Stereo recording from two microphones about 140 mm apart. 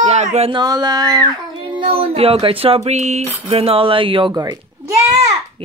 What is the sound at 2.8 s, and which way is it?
Speech, 55° right (ahead or behind).